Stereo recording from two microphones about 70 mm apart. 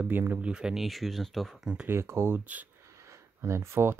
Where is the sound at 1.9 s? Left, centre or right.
Right.